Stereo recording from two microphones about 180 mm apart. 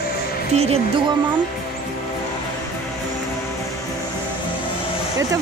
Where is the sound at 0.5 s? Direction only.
35° right (ahead or behind).